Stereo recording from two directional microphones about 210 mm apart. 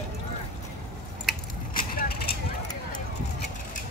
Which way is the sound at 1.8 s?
45° left (ahead or behind).